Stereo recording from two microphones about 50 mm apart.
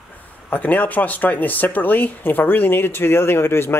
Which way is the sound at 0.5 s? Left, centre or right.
Left.